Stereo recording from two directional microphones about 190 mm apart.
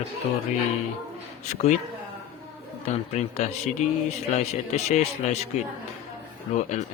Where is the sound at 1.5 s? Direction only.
35° left (ahead or behind).